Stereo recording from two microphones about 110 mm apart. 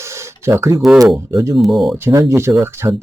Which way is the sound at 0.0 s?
25° right (ahead or behind).